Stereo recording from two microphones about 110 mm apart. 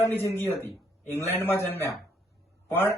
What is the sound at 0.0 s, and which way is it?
A man's voice, 20° left (ahead or behind).